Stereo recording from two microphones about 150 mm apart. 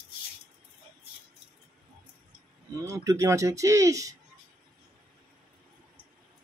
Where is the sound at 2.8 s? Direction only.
20° right (ahead or behind).